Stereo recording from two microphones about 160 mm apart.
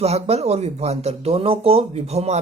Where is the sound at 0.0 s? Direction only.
40° right (ahead or behind).